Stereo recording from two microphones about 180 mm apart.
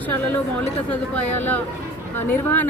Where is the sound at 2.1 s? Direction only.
10° left (ahead or behind).